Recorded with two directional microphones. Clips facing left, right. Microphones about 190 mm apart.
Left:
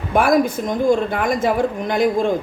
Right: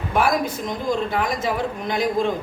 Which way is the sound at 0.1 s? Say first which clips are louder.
Left 5 dB; 50° left (ahead or behind).